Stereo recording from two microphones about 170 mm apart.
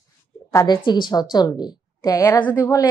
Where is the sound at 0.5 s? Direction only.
20° left (ahead or behind).